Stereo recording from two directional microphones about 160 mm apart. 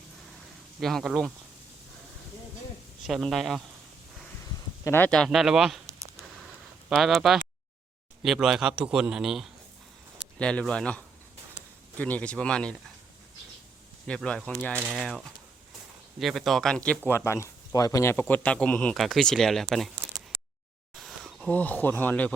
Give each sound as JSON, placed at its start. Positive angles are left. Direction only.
{"t": 0.8, "sound": "a man's voice", "side_deg": 0}
{"t": 3.1, "sound": "a man's voice", "side_deg": 0}
{"t": 4.4, "sound": "speech", "side_deg": 20}
{"t": 6.9, "sound": "a man's voice", "side_deg": 0}
{"t": 14.1, "sound": "a man's voice", "side_deg": 5}
{"t": 16.2, "sound": "a man's voice", "side_deg": 0}
{"t": 20.9, "sound": "a sound", "side_deg": 0}
{"t": 21.5, "sound": "speech", "side_deg": 10}